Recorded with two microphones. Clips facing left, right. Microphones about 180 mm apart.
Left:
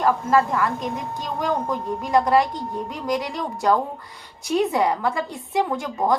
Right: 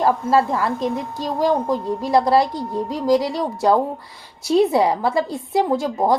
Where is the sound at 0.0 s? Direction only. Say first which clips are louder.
Right 2 dB; 30° right (ahead or behind).